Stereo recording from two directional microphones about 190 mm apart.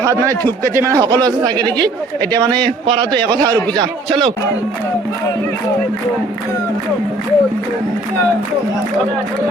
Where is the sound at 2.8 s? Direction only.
30° right (ahead or behind).